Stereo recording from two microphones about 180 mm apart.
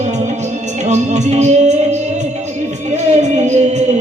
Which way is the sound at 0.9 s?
40° right (ahead or behind).